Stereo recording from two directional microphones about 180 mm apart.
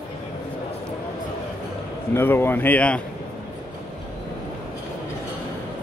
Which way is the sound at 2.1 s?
10° left (ahead or behind).